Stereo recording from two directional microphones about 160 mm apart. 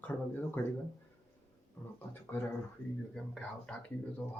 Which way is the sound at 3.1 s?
5° left (ahead or behind).